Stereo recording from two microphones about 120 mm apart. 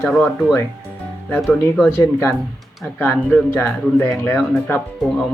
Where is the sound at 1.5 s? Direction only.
10° left (ahead or behind).